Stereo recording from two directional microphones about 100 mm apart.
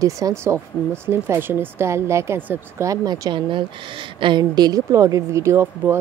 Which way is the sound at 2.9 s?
45° right (ahead or behind).